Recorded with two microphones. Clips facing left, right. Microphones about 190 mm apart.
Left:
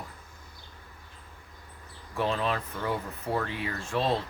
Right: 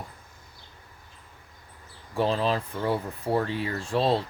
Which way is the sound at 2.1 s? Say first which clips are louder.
Right 4 dB; 35° right (ahead or behind).